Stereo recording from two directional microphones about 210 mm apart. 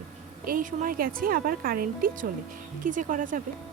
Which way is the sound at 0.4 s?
40° right (ahead or behind).